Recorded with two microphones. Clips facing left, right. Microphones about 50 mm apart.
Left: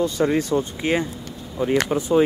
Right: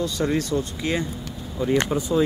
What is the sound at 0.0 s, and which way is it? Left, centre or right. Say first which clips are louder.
Speech: left 3 dB; left.